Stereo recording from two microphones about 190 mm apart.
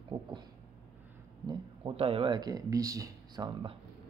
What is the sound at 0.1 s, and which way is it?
Speech, 30° right (ahead or behind).